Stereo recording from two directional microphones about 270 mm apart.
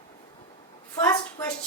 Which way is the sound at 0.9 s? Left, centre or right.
Centre.